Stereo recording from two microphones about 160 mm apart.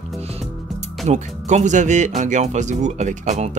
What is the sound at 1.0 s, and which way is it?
Speech, 45° right (ahead or behind).